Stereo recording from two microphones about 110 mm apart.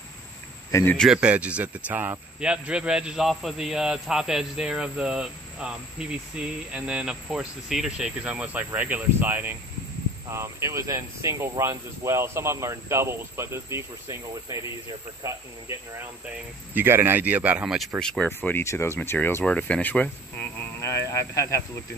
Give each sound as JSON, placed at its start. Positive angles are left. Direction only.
{"t": 0.9, "sound": "speech", "side_deg": -5}
{"t": 15.2, "sound": "speech", "side_deg": -25}
{"t": 17.7, "sound": "speech", "side_deg": 0}
{"t": 18.6, "sound": "speech", "side_deg": 25}
{"t": 20.8, "sound": "speech", "side_deg": 25}